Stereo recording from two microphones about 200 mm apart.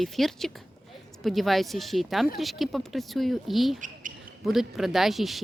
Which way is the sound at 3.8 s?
40° right (ahead or behind).